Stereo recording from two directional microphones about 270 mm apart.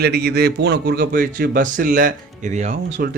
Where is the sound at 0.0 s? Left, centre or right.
Right.